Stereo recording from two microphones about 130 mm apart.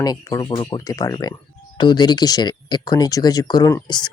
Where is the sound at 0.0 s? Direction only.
30° left (ahead or behind).